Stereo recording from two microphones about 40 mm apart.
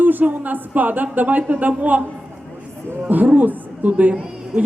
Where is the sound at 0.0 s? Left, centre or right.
Right.